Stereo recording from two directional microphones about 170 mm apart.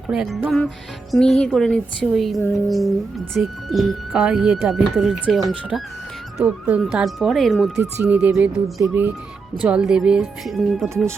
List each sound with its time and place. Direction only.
0.1 s speech: 5° right (ahead or behind)
10.8 s speech: 15° right (ahead or behind)